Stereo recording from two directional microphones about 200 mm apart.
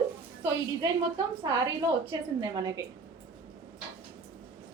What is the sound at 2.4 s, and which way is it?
Speech, 20° right (ahead or behind).